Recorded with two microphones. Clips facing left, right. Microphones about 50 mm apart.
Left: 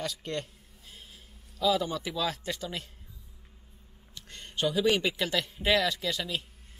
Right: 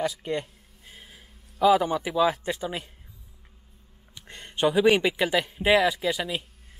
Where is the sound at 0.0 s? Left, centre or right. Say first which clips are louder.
Right 6 dB; centre.